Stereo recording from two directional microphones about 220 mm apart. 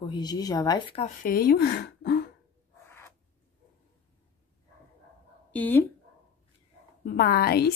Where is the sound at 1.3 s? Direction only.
45° left (ahead or behind).